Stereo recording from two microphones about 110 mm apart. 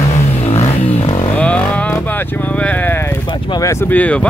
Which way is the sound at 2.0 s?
15° left (ahead or behind).